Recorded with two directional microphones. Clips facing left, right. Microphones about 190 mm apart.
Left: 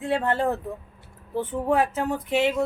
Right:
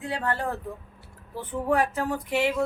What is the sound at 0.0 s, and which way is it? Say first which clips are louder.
Speech: left 5 dB; 25° left (ahead or behind).